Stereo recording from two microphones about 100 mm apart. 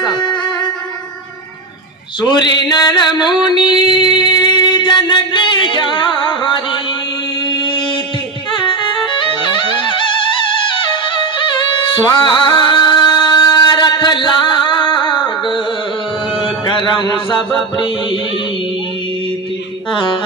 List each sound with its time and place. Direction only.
0.0 s music: 50° left (ahead or behind)
2.2 s mantra: 45° left (ahead or behind)
3.3 s a sound: 50° left (ahead or behind)
3.9 s music: 50° left (ahead or behind)
11.3 s music: 55° left (ahead or behind)
16.6 s music: 50° left (ahead or behind)